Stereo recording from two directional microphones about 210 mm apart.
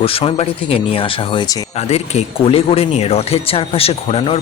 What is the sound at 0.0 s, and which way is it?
Speech, 25° left (ahead or behind).